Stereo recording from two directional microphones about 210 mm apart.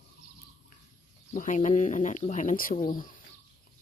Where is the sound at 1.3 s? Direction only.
40° left (ahead or behind).